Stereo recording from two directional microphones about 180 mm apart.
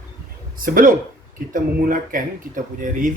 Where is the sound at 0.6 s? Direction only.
50° right (ahead or behind).